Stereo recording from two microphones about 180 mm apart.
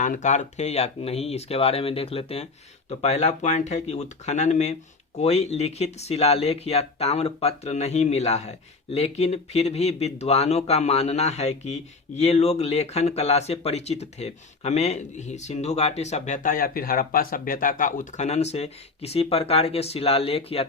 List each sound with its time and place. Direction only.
0.0 s speech: 45° left (ahead or behind)